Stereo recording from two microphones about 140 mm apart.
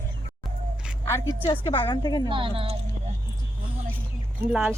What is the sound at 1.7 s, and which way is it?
Speech, 30° left (ahead or behind).